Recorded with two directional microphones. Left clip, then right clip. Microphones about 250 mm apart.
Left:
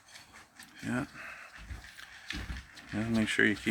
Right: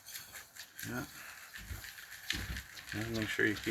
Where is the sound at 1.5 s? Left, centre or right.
Right.